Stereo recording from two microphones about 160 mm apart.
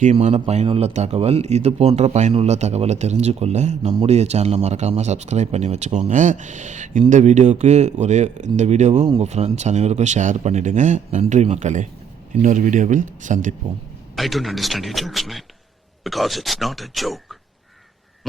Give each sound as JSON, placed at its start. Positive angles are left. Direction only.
{"t": 0.0, "sound": "speech", "side_deg": -45}
{"t": 14.2, "sound": "speech", "side_deg": 0}